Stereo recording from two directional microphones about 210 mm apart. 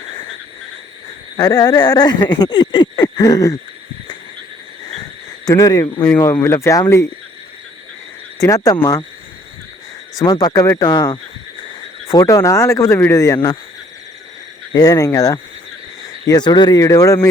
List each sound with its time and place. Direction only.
1.4 s speech: 20° left (ahead or behind)
5.5 s speech: 15° left (ahead or behind)
8.4 s speech: 15° left (ahead or behind)
10.2 s speech: 20° left (ahead or behind)
14.7 s speech: 20° left (ahead or behind)